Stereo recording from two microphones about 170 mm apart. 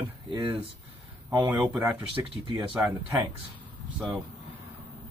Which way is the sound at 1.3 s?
10° right (ahead or behind).